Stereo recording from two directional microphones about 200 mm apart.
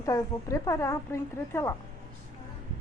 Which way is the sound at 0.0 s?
15° left (ahead or behind).